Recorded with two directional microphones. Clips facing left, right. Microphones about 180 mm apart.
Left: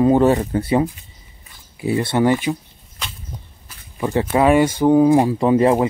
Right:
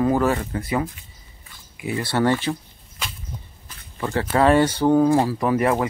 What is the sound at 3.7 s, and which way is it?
Speech, 15° left (ahead or behind).